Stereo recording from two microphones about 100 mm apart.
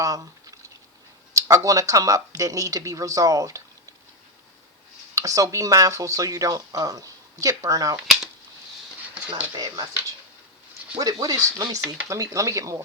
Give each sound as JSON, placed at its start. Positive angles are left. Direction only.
{"t": 0.0, "sound": "speech", "side_deg": -35}
{"t": 5.1, "sound": "speech", "side_deg": -35}
{"t": 9.6, "sound": "speech", "side_deg": -40}
{"t": 10.9, "sound": "speech", "side_deg": -40}